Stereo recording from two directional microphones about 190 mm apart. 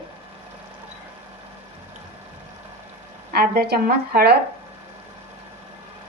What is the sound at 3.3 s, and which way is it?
Speech, 55° right (ahead or behind).